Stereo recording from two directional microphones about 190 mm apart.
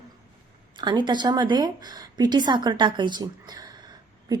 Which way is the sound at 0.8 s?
25° right (ahead or behind).